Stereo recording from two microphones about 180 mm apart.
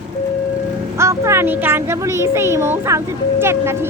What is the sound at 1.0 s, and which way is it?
Speech, 15° right (ahead or behind).